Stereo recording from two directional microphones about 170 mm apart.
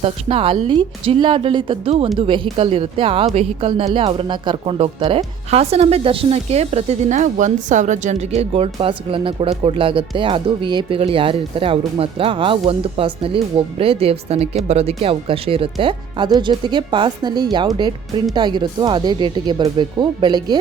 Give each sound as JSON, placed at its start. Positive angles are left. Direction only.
{"t": 0.0, "sound": "speech", "side_deg": -35}